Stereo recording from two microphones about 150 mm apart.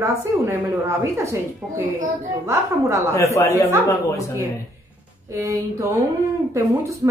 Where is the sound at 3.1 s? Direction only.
20° left (ahead or behind).